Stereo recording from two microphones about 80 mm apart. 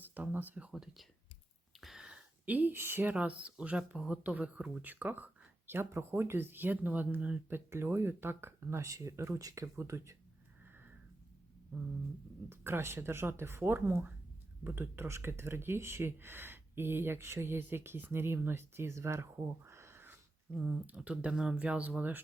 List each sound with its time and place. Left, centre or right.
0.0 s speech: right
0.7 s speech: centre
1.8 s a sound: centre
2.0 s speech: centre
8.8 s speech: right
12.5 s speech: right
20.5 s speech: centre